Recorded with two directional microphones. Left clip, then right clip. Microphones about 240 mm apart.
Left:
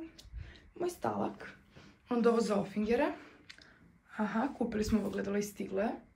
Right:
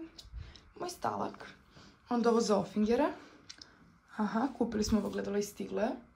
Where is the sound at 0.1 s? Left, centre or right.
Centre.